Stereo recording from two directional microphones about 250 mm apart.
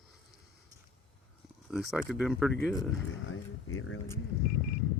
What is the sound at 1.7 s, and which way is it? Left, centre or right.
Speech, centre.